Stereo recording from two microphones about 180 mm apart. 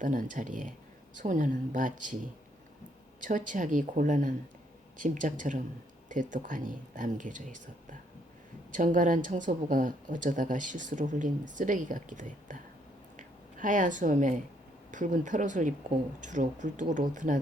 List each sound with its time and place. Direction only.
0.0 s speech: 45° right (ahead or behind)
3.2 s speech: 45° right (ahead or behind)
13.1 s a sound: 45° right (ahead or behind)
14.8 s speech: 45° right (ahead or behind)